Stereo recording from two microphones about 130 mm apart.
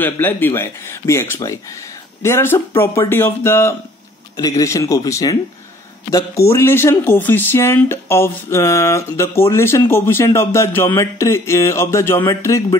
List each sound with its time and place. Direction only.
0.0 s speech: 15° left (ahead or behind)